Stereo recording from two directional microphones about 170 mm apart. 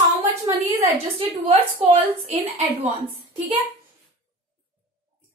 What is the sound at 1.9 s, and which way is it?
A woman's voice, 35° right (ahead or behind).